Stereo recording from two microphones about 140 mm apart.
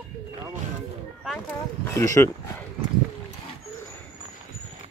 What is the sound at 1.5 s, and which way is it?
Speech, 20° left (ahead or behind).